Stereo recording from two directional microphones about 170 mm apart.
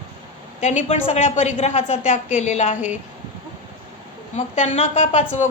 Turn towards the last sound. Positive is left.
turn(degrees=40)  # may be behind; listen again after turning